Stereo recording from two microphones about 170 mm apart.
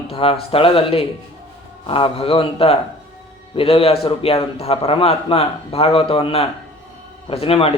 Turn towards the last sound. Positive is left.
turn(degrees=35)  # may be behind; listen again after turning